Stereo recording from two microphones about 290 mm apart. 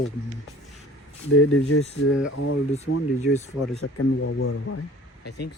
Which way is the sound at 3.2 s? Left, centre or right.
Left.